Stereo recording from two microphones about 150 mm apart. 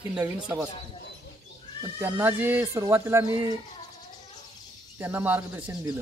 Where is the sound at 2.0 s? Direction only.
10° right (ahead or behind).